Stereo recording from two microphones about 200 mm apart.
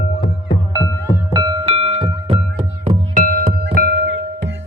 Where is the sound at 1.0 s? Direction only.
20° right (ahead or behind); by 4.2 s 60° right (ahead or behind).